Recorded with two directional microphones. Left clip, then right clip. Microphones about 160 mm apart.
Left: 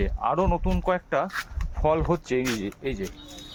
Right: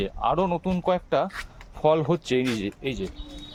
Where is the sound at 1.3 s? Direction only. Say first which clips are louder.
Left 4 dB; 65° left (ahead or behind).